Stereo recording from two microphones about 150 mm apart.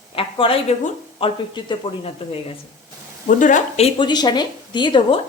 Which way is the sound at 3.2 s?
55° left (ahead or behind).